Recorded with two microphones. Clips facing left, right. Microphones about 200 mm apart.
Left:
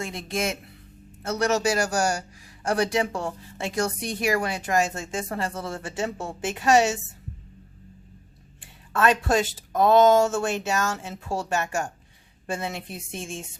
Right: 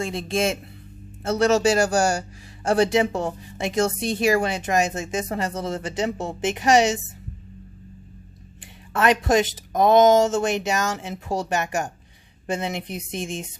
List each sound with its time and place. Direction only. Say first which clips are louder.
0.0 s speech: right 5 dB; 30° right (ahead or behind)
8.6 s speech: right 2 dB; 15° right (ahead or behind)